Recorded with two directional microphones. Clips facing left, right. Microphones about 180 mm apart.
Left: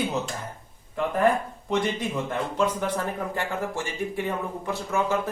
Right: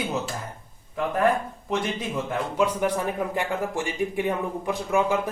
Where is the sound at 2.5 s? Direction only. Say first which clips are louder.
Right 3 dB; 10° right (ahead or behind).